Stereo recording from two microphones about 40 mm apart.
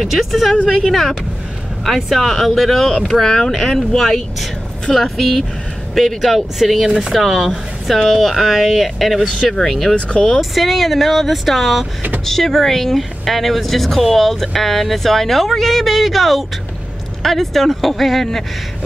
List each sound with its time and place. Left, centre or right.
0.0 s speech: centre
0.7 s a woman's voice: centre
3.5 s speech: centre
9.9 s speech: left
10.5 s speech: centre